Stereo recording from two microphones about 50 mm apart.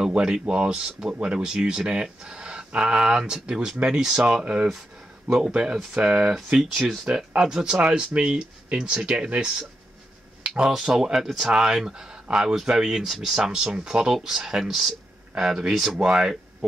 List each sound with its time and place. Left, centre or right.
0.1 s speech: centre
5.9 s speech: centre